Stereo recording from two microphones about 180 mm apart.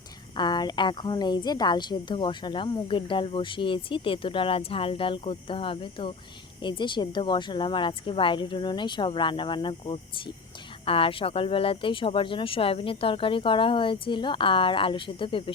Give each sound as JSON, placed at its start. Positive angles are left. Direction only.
{"t": 0.3, "sound": "a woman's voice", "side_deg": 25}